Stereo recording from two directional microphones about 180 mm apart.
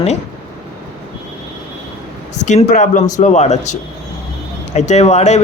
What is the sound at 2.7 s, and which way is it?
Speech, 40° left (ahead or behind).